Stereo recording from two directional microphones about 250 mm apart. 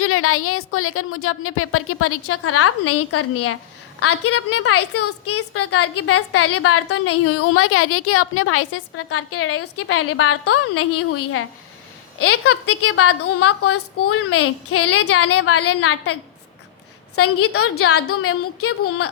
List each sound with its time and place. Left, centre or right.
0.0 s a woman's voice: left
17.2 s a woman's voice: left